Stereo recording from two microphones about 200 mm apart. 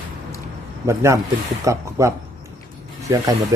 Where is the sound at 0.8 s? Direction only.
15° right (ahead or behind).